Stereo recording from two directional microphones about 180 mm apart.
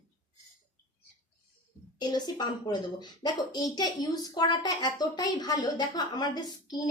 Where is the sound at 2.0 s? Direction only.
25° left (ahead or behind).